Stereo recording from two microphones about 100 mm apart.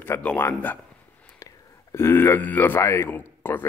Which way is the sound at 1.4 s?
30° left (ahead or behind).